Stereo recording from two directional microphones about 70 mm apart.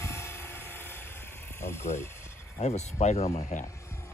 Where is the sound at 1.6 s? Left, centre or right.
Left.